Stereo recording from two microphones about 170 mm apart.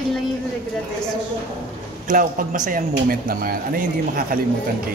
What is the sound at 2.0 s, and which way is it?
A man's voice, 50° right (ahead or behind).